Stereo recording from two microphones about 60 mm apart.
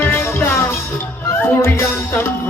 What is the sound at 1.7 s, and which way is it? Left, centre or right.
Music, left.